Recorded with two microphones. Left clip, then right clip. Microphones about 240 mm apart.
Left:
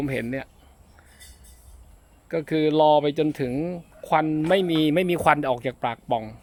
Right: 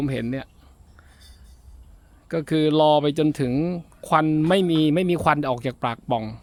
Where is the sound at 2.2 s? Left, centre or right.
Right.